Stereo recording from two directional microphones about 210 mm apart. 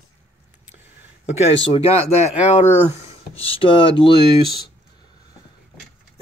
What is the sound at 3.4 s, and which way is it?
Speech, 25° left (ahead or behind).